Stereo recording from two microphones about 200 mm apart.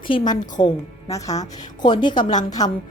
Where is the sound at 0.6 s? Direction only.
20° left (ahead or behind).